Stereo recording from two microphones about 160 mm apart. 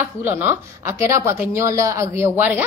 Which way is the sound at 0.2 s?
10° right (ahead or behind).